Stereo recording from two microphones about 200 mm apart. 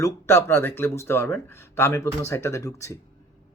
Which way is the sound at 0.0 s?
10° left (ahead or behind).